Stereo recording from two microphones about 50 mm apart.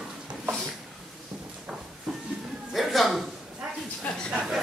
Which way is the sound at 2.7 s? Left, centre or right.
Centre.